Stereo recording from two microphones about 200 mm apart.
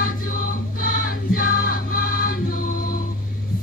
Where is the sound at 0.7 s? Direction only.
45° left (ahead or behind).